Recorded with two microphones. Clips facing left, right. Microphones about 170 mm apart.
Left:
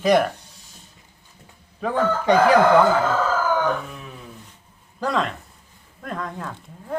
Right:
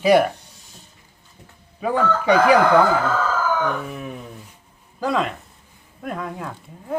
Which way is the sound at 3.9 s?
60° right (ahead or behind).